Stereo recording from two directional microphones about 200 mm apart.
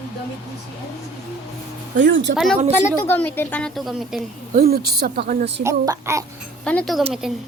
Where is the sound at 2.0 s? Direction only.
65° right (ahead or behind).